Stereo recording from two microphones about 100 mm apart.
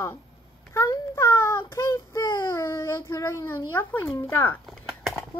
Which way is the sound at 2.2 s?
45° left (ahead or behind).